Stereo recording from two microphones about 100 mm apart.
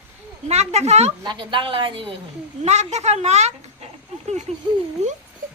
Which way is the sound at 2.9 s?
90° right.